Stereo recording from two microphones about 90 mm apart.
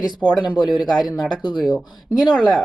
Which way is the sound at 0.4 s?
55° left (ahead or behind).